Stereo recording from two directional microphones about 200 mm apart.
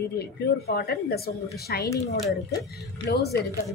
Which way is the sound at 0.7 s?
50° left (ahead or behind).